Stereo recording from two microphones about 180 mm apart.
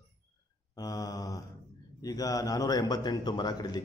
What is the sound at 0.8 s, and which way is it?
A man's voice, 20° left (ahead or behind).